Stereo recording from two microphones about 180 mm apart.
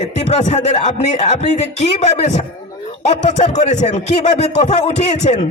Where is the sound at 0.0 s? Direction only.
40° left (ahead or behind).